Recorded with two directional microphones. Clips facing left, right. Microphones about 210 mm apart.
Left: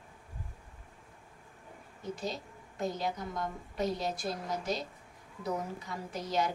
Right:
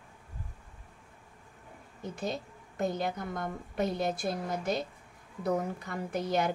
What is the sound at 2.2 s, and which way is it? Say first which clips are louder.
A woman's voice: right 3 dB; 55° right (ahead or behind).